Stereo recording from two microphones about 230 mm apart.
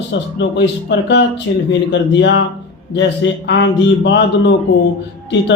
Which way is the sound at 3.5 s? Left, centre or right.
Left.